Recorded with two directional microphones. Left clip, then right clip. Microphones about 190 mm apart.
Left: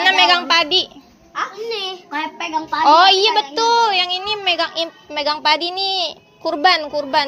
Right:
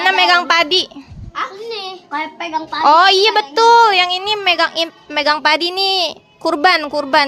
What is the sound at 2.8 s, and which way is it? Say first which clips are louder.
A woman's voice: right 2 dB; 40° right (ahead or behind).